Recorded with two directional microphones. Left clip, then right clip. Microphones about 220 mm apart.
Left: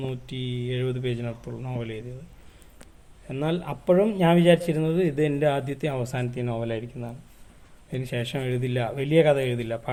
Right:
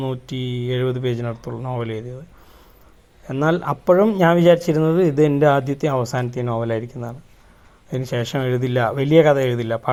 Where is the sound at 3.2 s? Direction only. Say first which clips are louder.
Right 9 dB; 25° right (ahead or behind).